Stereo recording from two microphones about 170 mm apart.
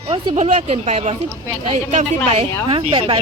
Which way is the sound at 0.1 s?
40° right (ahead or behind).